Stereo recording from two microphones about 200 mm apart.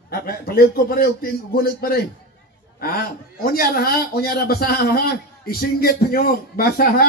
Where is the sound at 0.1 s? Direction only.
50° left (ahead or behind).